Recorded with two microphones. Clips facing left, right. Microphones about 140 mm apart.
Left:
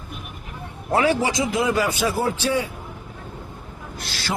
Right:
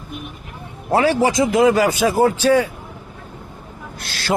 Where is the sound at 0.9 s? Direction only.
35° right (ahead or behind).